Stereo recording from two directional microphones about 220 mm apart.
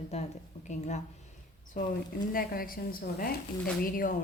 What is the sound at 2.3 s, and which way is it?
A woman's voice, 40° left (ahead or behind).